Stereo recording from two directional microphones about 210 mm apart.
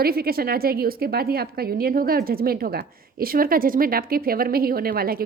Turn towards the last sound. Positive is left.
turn(degrees=-45)  # may be behind; listen again after turning